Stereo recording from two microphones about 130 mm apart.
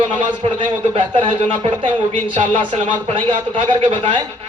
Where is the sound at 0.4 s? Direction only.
40° right (ahead or behind).